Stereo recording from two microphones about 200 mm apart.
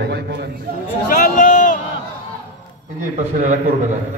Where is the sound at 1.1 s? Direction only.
40° left (ahead or behind).